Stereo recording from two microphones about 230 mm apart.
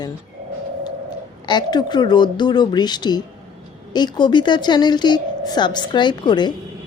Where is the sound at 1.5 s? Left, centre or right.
Centre.